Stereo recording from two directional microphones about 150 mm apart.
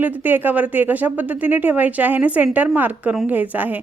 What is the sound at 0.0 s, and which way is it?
Speech, 10° right (ahead or behind).